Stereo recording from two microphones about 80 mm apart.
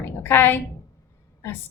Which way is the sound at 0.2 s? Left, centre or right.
Left.